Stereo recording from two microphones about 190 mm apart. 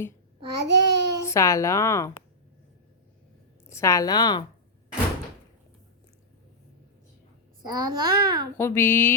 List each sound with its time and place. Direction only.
0.5 s a child's voice: 60° right (ahead or behind)
1.2 s speech: 15° left (ahead or behind)
3.7 s speech: 15° left (ahead or behind)
7.6 s a child's voice: 20° right (ahead or behind)
8.5 s speech: 10° left (ahead or behind)